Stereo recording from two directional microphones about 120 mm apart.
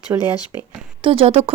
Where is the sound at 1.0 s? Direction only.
50° right (ahead or behind).